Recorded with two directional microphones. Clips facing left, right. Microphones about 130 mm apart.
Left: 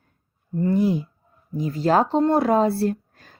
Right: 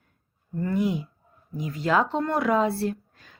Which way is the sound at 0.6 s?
30° left (ahead or behind).